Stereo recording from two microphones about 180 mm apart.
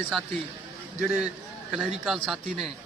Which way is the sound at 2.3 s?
Centre (ahead or behind).